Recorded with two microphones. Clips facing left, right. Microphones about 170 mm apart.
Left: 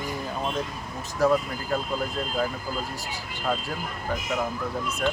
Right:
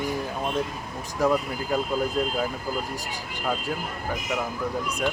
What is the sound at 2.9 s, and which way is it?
Speech, 15° right (ahead or behind).